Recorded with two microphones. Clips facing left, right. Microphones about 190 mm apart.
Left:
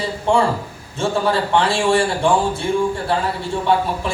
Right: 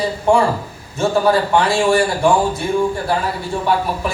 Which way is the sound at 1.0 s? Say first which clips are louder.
Right 4 dB; 30° left (ahead or behind).